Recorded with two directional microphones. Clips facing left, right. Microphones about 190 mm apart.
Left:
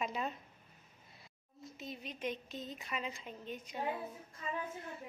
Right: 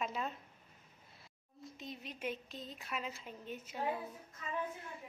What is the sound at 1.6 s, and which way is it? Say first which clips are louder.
A woman's voice: left 1 dB; centre (ahead or behind).